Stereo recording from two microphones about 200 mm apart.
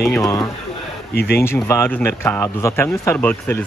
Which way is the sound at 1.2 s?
50° left (ahead or behind).